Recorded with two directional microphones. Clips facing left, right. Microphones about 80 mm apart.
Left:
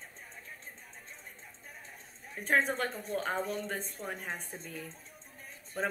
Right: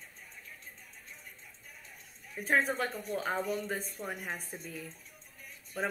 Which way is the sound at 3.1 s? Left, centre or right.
Centre.